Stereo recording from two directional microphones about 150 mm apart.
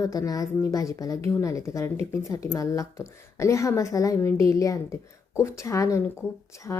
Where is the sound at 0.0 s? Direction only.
25° left (ahead or behind).